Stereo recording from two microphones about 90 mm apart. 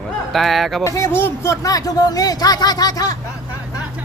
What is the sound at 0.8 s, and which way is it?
Speech, 35° left (ahead or behind).